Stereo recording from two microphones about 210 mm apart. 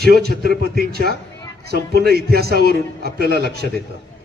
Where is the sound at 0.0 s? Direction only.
50° right (ahead or behind).